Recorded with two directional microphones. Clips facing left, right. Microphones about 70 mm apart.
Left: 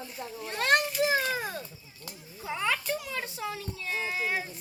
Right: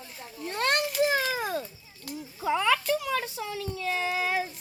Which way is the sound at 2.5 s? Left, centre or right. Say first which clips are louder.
Right 6 dB; right.